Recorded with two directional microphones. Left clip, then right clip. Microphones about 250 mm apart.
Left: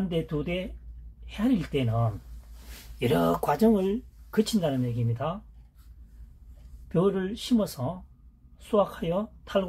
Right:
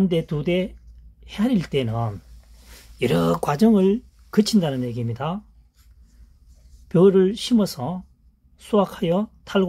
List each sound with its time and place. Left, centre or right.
0.1 s speech: right
6.9 s speech: right